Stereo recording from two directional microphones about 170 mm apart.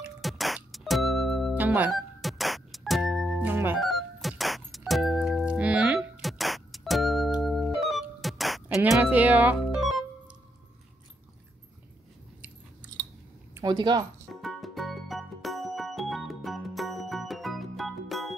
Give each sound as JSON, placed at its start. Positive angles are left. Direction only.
{"t": 0.2, "sound": "music", "side_deg": 0}
{"t": 3.7, "sound": "music", "side_deg": 0}
{"t": 12.8, "sound": "chewing", "side_deg": -10}
{"t": 13.6, "sound": "speech", "side_deg": -25}
{"t": 14.3, "sound": "music", "side_deg": 0}